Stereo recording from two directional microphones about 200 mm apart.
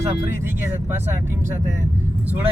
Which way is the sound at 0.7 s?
10° right (ahead or behind).